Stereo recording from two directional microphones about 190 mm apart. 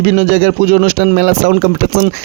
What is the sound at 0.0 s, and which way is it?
Speech, 55° right (ahead or behind).